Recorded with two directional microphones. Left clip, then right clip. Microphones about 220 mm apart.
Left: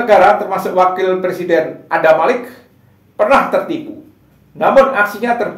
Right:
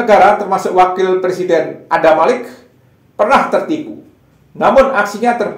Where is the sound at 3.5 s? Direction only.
35° right (ahead or behind).